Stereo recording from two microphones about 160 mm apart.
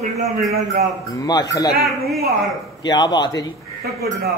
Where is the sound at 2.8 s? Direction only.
25° left (ahead or behind).